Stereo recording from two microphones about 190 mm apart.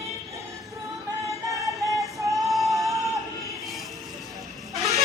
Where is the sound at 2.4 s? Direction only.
Centre (ahead or behind).